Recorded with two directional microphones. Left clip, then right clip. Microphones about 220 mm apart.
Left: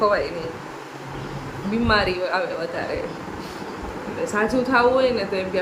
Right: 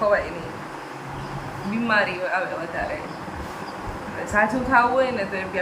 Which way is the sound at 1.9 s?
15° left (ahead or behind).